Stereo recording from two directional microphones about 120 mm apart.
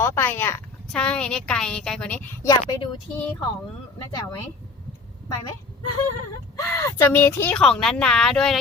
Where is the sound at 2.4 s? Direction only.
35° left (ahead or behind).